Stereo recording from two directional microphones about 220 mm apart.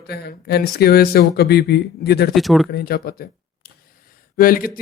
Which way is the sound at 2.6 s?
45° left (ahead or behind).